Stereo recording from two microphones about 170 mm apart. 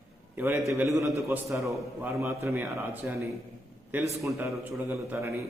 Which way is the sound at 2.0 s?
15° right (ahead or behind).